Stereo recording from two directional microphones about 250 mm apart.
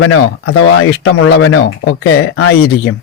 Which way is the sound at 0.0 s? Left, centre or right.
Left.